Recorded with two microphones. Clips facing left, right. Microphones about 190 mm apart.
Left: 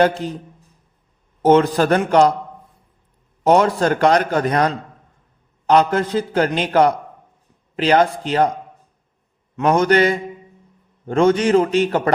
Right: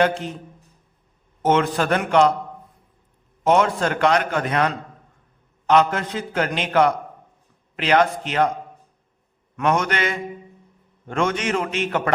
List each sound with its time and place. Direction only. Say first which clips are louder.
0.0 s a man's voice: left 3 dB; 35° left (ahead or behind)
1.4 s a man's voice: left 6 dB; 35° left (ahead or behind)
3.4 s a man's voice: left 4 dB; 40° left (ahead or behind)
9.6 s a man's voice: left 7 dB; 35° left (ahead or behind)